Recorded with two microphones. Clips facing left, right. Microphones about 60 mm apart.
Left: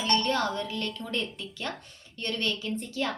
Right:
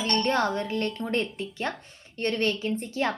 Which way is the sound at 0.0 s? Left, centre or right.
Right.